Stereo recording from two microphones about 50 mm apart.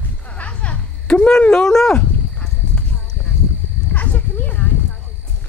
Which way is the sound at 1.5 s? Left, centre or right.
Centre.